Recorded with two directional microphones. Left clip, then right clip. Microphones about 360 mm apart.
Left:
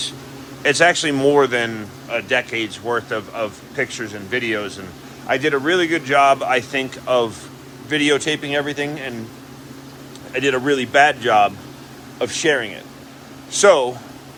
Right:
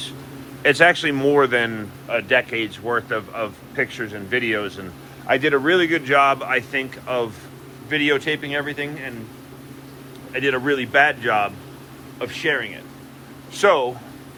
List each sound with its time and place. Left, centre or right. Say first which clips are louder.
0.6 s speech: even; centre
10.3 s speech: left 2 dB; centre